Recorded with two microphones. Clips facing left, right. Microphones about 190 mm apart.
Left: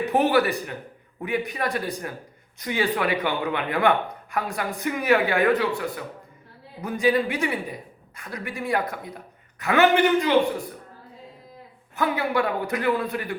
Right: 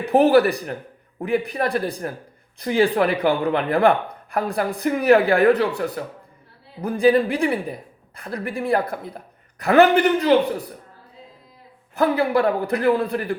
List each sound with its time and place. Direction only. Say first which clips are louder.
0.0 s speech: right 5 dB; 35° right (ahead or behind)
11.9 s speech: right 5 dB; 35° right (ahead or behind)